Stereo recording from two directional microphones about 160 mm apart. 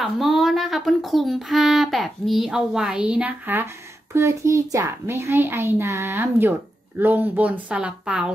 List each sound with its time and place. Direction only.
0.0 s a child's voice: centre (ahead or behind)